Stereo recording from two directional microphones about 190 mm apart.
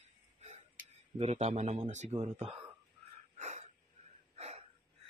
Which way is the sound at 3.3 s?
35° right (ahead or behind).